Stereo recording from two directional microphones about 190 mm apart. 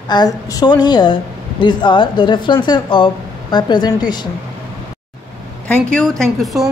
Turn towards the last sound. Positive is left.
turn(degrees=0)  # may be behind; listen again after turning